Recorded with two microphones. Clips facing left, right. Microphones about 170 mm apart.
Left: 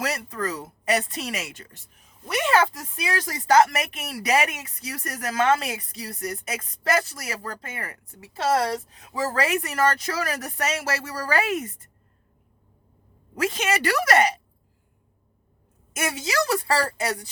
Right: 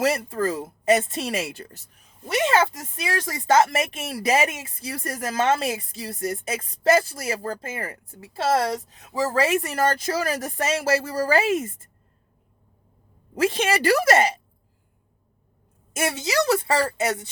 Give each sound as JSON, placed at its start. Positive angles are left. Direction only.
{"t": 0.0, "sound": "speech", "side_deg": -25}
{"t": 9.2, "sound": "speech", "side_deg": -25}
{"t": 13.4, "sound": "speech", "side_deg": -30}
{"t": 15.9, "sound": "speech", "side_deg": -25}